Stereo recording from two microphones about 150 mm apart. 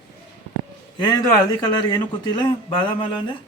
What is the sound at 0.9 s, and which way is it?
A man's voice, 30° left (ahead or behind).